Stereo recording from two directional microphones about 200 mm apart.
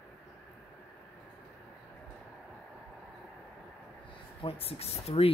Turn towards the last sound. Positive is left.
turn(degrees=30)  # may be behind; listen again after turning